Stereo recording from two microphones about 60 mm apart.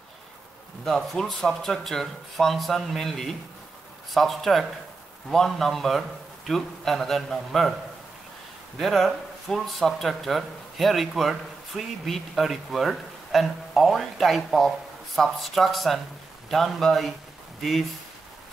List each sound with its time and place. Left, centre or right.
0.8 s speech: centre
8.7 s speech: centre